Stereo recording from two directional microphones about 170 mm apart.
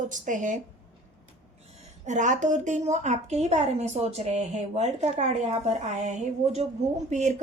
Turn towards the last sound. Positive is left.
turn(degrees=-45)  # may be behind; listen again after turning